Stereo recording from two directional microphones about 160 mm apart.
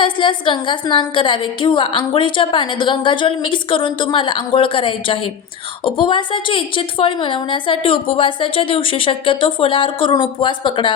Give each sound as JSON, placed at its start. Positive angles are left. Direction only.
{"t": 0.0, "sound": "a woman's voice", "side_deg": 30}